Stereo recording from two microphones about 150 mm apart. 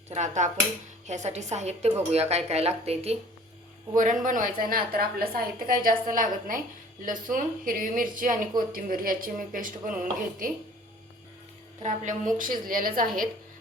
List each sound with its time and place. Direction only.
0.1 s a woman's voice: 50° right (ahead or behind)
3.9 s a woman's voice: 60° right (ahead or behind)
11.8 s a woman's voice: 60° right (ahead or behind)